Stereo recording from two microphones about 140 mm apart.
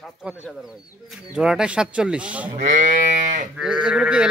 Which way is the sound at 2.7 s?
70° right (ahead or behind).